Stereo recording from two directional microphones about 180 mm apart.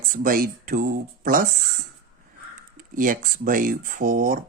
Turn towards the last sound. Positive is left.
turn(degrees=-50)  # may be behind; listen again after turning